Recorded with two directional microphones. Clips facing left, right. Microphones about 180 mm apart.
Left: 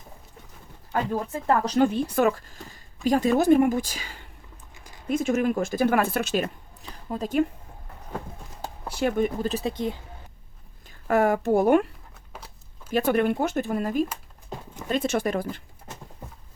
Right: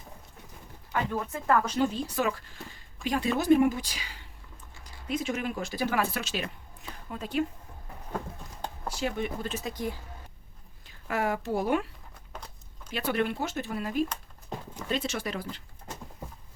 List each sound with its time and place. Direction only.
1.1 s speech: 30° left (ahead or behind)
1.7 s speech: 55° left (ahead or behind)
6.9 s a woman's voice: 35° left (ahead or behind)
8.9 s speech: 55° left (ahead or behind); by 10.0 s 25° left (ahead or behind)
10.8 s speech: 50° left (ahead or behind)
12.3 s a sound: 5° left (ahead or behind)
12.9 s speech: 50° left (ahead or behind)